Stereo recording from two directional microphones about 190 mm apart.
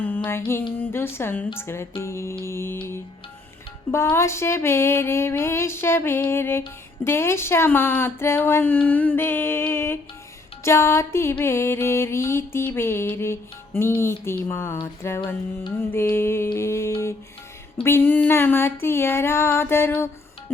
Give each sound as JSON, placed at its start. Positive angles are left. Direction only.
{"t": 0.3, "sound": "music", "side_deg": 15}
{"t": 3.9, "sound": "music", "side_deg": 15}